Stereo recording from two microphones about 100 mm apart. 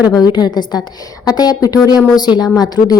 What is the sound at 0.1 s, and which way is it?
A woman's voice, 40° left (ahead or behind).